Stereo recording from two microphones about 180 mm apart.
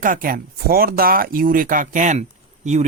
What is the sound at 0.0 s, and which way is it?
A woman's voice, 50° right (ahead or behind).